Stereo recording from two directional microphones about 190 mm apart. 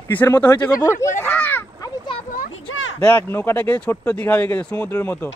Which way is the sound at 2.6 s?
80° left.